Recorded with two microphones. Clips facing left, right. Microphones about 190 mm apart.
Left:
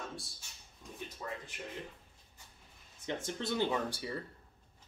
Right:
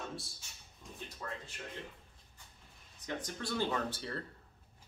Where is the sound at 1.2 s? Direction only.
10° left (ahead or behind).